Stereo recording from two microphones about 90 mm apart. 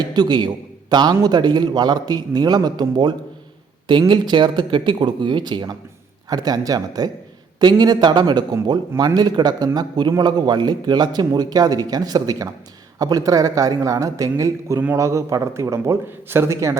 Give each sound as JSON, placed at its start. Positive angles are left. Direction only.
{"t": 0.1, "sound": "a man's voice", "side_deg": -50}